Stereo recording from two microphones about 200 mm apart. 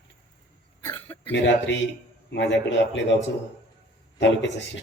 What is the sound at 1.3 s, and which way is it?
A man's voice, 65° left (ahead or behind).